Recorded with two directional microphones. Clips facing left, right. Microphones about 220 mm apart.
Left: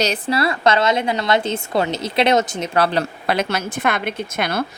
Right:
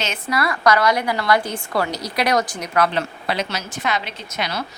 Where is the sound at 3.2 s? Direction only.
55° left (ahead or behind).